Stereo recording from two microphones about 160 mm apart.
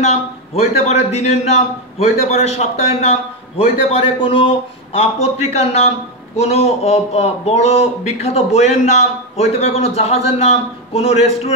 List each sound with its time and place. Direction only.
0.0 s a man's voice: 40° left (ahead or behind)